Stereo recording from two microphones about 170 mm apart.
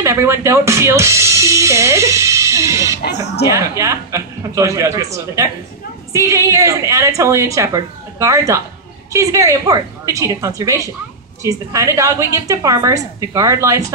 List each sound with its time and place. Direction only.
0.0 s speech: 15° right (ahead or behind)
3.0 s speech: 75° left (ahead or behind)
3.4 s a woman's voice: 15° right (ahead or behind)